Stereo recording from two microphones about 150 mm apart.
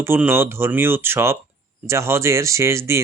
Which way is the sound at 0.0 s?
15° right (ahead or behind).